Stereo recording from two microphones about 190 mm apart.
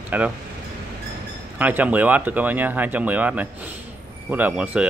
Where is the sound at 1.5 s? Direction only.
10° right (ahead or behind).